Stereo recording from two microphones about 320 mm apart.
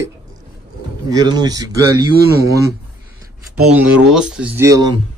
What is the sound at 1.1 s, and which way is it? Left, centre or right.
Speech, centre.